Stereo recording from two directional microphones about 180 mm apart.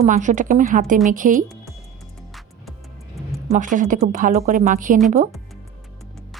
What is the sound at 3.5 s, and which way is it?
Speech, 45° right (ahead or behind).